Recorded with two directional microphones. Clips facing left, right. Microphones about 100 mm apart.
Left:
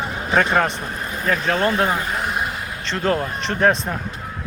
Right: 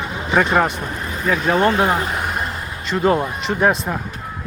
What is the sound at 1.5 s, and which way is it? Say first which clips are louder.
Speech: right 4 dB; 15° right (ahead or behind).